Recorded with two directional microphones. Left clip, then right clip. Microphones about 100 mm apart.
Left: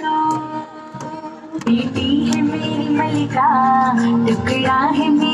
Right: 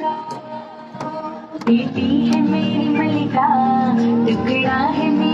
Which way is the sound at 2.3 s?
25° left (ahead or behind).